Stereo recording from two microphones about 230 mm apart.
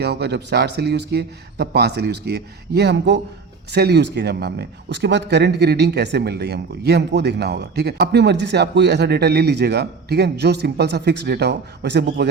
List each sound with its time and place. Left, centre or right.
0.0 s speech: right